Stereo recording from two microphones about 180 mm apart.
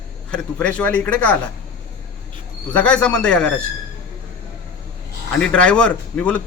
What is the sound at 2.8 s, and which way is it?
Speech, 5° left (ahead or behind).